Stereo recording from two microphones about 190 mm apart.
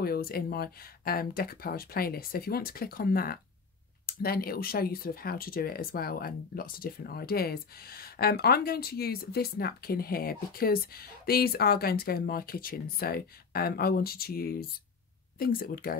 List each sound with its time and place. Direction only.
0.0 s speech: 55° left (ahead or behind)